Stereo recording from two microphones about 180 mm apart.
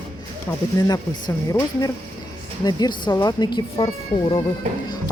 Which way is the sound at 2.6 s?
20° left (ahead or behind).